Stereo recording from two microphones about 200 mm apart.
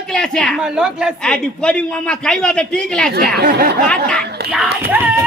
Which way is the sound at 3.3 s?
50° right (ahead or behind).